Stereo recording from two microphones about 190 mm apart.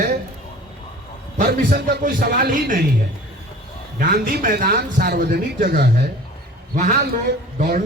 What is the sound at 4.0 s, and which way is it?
A man's voice, 50° right (ahead or behind).